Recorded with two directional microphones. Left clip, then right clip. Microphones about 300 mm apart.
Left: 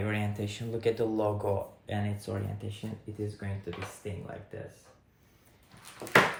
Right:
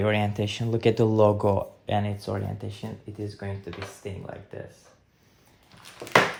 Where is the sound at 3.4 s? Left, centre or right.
Right.